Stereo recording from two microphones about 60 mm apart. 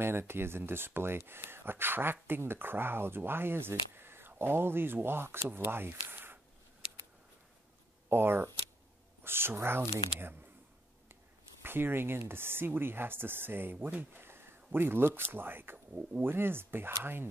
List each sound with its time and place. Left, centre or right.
0.0 s speech: right
8.1 s speech: right
10.1 s speech: centre
11.6 s speech: right